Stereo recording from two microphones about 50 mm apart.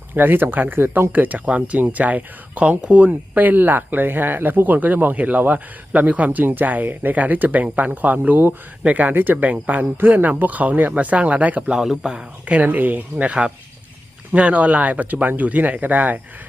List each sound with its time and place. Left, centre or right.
0.1 s speech: right
3.1 s speech: right
11.7 s a man's voice: centre
12.5 s speech: right